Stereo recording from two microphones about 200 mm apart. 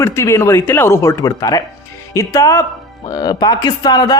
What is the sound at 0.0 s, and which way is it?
A man's voice, 15° left (ahead or behind).